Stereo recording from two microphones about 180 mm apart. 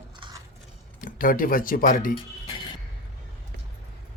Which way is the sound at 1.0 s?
50° left (ahead or behind).